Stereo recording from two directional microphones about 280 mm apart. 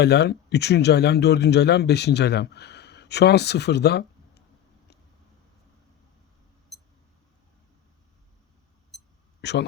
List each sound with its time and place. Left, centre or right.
0.0 s speech: left
6.7 s a sound: centre
9.4 s speech: left